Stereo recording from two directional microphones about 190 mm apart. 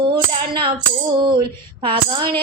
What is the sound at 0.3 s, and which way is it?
Music, 25° right (ahead or behind).